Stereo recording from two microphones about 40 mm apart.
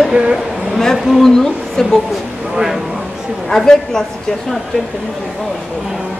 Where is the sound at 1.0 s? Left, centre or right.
Centre.